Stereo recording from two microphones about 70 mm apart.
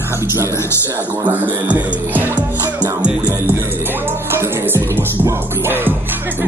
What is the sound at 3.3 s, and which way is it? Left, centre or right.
Music, right.